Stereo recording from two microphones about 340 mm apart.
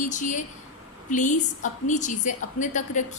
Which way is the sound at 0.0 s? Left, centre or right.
Left.